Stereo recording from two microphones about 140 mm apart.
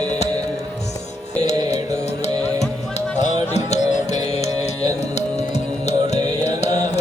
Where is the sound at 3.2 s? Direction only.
55° left (ahead or behind).